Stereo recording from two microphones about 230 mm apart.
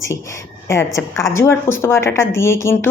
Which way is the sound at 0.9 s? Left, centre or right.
Centre.